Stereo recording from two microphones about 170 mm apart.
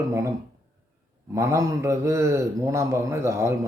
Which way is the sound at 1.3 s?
15° right (ahead or behind).